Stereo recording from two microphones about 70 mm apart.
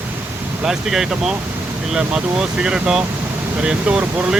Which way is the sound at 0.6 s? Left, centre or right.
Centre.